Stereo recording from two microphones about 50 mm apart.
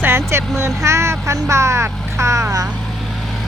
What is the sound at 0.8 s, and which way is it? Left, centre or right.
Speech, right.